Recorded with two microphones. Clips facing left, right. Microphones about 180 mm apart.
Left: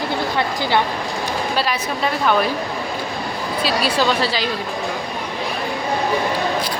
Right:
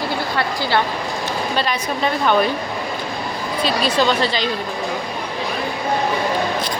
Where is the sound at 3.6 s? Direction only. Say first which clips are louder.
Right 1 dB; 10° left (ahead or behind).